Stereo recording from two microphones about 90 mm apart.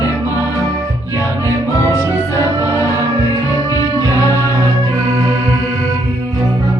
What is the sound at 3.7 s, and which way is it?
Music, 40° left (ahead or behind).